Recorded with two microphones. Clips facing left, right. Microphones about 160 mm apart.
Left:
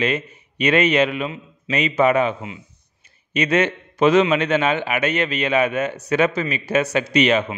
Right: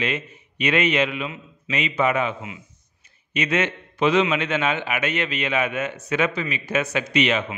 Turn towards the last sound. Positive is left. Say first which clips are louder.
# left 4 dB
turn(degrees=40)  # may be behind; listen again after turning